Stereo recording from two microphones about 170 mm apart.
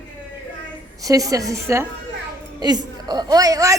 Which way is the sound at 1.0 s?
20° right (ahead or behind).